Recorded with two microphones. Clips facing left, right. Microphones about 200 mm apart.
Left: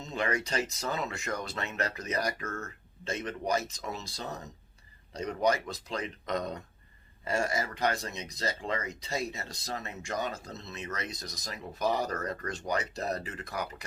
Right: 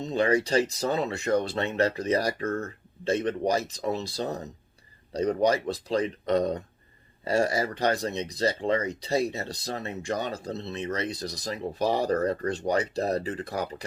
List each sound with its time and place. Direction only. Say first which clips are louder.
0.0 s speech: right 8 dB; 30° right (ahead or behind)